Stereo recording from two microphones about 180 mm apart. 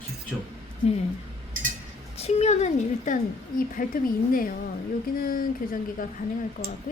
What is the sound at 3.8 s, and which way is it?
Speech, 50° left (ahead or behind).